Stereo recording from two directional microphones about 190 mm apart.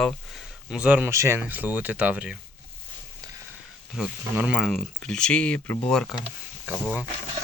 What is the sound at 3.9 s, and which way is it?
Speech, 5° right (ahead or behind).